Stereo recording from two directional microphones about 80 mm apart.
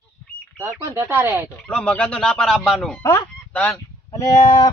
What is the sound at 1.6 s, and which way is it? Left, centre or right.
Speech, centre.